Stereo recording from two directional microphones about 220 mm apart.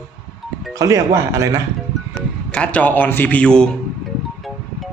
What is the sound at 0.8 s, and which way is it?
Speech, 15° right (ahead or behind).